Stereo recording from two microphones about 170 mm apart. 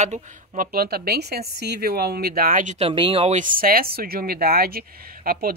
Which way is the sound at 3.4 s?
55° right (ahead or behind).